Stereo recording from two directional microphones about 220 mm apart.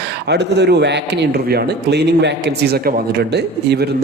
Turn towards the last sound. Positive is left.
turn(degrees=-50)  # may be behind; listen again after turning